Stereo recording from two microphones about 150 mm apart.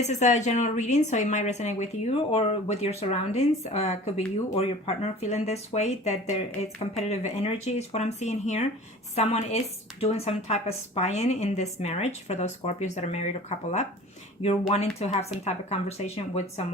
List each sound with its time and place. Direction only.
0.1 s speech: 55° left (ahead or behind)